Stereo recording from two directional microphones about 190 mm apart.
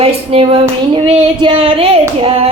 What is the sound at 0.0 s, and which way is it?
Female singing, 30° right (ahead or behind).